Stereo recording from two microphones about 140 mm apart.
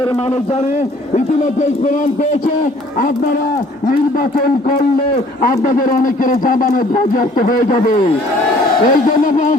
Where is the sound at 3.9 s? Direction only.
90° left.